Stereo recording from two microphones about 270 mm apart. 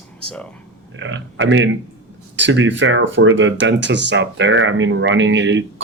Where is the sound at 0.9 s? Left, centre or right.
Right.